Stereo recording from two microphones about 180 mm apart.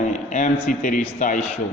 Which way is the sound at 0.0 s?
45° left (ahead or behind).